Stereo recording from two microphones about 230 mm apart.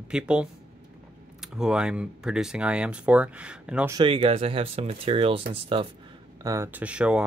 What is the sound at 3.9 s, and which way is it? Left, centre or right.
Speech, right.